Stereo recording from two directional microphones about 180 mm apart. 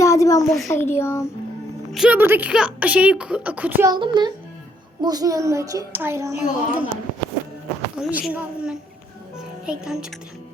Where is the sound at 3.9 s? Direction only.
25° right (ahead or behind).